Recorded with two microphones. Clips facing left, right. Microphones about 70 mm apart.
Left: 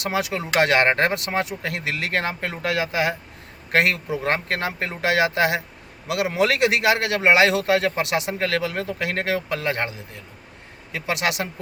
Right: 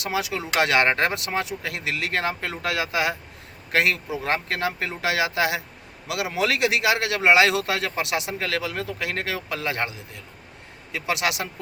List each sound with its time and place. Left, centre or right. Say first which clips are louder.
0.0 s a man's voice: left 2 dB; left
3.7 s a man's voice: left 2 dB; left
10.9 s a man's voice: left 1 dB; left